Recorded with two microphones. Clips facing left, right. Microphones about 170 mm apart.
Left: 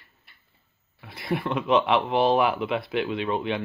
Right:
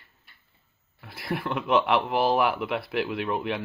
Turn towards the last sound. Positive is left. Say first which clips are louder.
# left 2 dB
turn(degrees=0)  # may be behind; listen again after turning